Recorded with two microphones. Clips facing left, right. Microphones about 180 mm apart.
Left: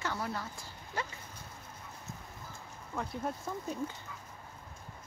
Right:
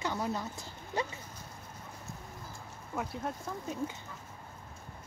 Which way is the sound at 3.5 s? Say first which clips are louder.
Left 1 dB; centre (ahead or behind).